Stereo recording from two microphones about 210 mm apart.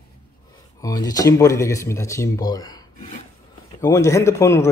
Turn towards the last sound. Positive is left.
turn(degrees=15)  # may be behind; listen again after turning